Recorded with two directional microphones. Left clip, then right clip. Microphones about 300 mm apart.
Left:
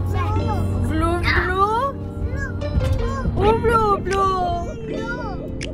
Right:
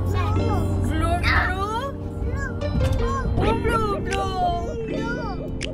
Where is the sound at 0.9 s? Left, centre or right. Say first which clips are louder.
Left 2 dB; centre.